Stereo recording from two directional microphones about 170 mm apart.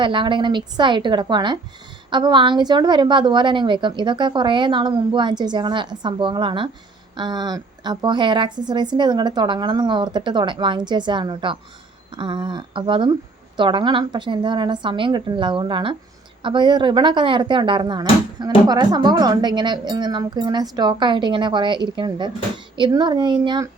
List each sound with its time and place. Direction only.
0.0 s a woman's voice: 30° right (ahead or behind)